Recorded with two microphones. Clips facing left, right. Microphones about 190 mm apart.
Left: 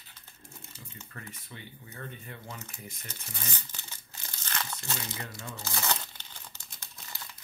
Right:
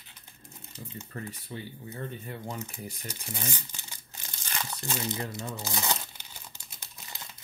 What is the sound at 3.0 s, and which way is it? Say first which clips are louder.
Crumpling: right 6 dB; 10° right (ahead or behind).